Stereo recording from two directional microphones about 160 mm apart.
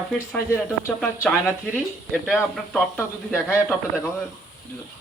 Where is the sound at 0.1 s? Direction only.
10° left (ahead or behind).